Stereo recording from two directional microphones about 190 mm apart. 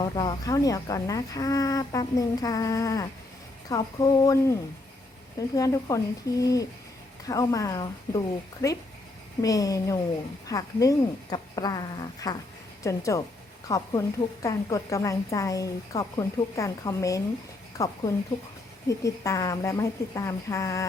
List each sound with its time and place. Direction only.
0.0 s speech: 20° left (ahead or behind)
5.5 s speech: 15° left (ahead or behind)